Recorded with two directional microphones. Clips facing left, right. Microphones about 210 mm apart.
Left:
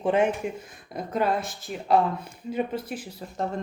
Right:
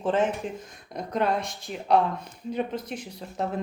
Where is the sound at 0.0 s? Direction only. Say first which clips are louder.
Left 2 dB; 10° left (ahead or behind).